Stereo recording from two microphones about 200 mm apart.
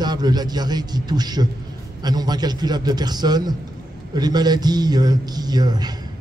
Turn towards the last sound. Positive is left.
turn(degrees=-20)  # may be behind; listen again after turning